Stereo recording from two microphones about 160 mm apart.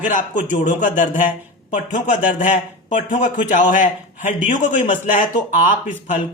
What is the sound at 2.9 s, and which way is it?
A man's voice, 45° left (ahead or behind).